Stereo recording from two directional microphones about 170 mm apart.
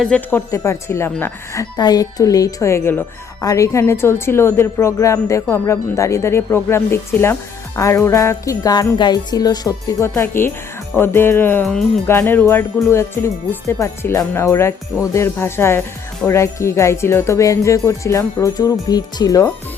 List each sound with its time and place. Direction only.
0.0 s a woman's voice: 10° left (ahead or behind)
1.7 s jingle bell: 25° left (ahead or behind)
3.4 s a woman's voice: 20° left (ahead or behind)
7.8 s jingle bell: 15° left (ahead or behind)
10.9 s a woman's voice: 15° left (ahead or behind)
11.6 s speech: centre (ahead or behind)
12.0 s a woman's voice: 15° left (ahead or behind)